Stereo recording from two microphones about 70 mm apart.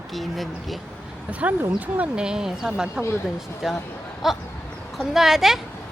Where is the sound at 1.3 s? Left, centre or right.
Right; by 5.5 s centre.